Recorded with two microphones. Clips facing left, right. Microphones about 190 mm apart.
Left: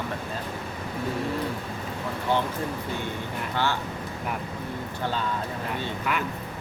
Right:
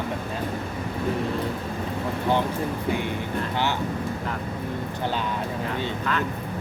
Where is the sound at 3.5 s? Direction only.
15° right (ahead or behind).